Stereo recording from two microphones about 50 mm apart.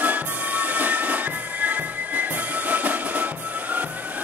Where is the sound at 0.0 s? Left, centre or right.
Right.